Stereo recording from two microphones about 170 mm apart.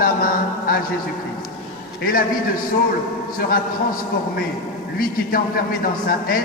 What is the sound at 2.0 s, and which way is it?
Speech, 60° left (ahead or behind).